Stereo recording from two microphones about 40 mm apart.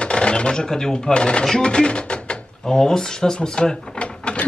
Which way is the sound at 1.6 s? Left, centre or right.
Left.